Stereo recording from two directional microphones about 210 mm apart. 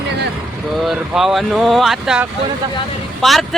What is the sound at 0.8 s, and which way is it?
A man's voice, centre (ahead or behind).